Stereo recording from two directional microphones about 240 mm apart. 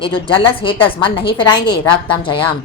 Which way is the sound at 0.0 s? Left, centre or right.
Left.